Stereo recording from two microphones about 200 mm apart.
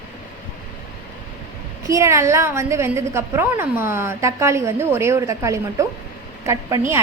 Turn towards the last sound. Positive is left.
turn(degrees=-15)  # may be behind; listen again after turning